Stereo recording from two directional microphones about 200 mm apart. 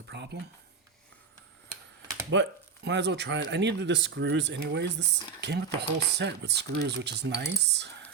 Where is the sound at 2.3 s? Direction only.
65° right (ahead or behind).